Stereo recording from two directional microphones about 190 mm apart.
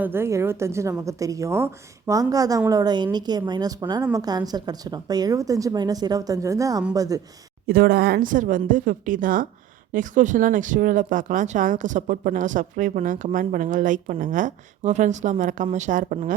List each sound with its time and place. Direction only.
0.0 s a woman's voice: 10° right (ahead or behind)
7.7 s speech: 50° right (ahead or behind)